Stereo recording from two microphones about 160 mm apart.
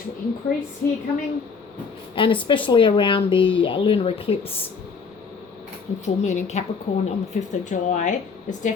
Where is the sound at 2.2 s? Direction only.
30° left (ahead or behind).